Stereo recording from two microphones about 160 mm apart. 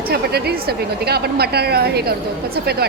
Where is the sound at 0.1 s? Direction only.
85° right.